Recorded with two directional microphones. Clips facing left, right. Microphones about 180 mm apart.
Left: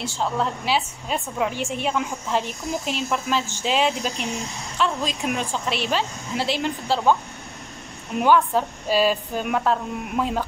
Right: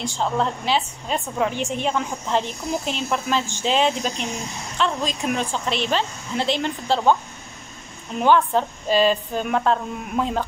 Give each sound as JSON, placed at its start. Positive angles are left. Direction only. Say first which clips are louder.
{"t": 0.0, "sound": "speech", "louder": "right 2 dB", "side_deg": 5}
{"t": 8.2, "sound": "speech", "louder": "right 1 dB", "side_deg": 5}